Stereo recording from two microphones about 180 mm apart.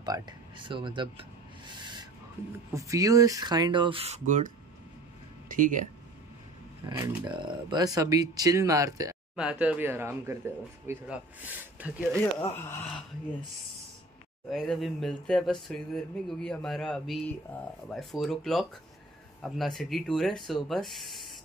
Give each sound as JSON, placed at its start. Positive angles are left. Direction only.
{"t": 0.0, "sound": "speech", "side_deg": -25}
{"t": 1.7, "sound": "owl", "side_deg": -25}
{"t": 2.7, "sound": "speech", "side_deg": -20}
{"t": 5.6, "sound": "speech", "side_deg": -45}
{"t": 7.2, "sound": "speech", "side_deg": -25}
{"t": 9.3, "sound": "speech", "side_deg": -5}
{"t": 12.4, "sound": "speech", "side_deg": 10}
{"t": 14.5, "sound": "speech", "side_deg": 0}